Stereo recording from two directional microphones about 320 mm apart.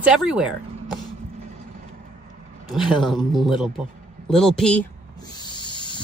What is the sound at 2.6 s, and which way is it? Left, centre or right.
Speech, centre.